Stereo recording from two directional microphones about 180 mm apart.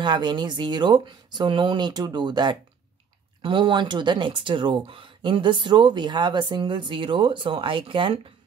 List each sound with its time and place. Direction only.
0.0 s speech: 25° right (ahead or behind)